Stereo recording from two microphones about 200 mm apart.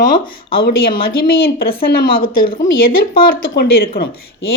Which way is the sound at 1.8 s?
45° left (ahead or behind).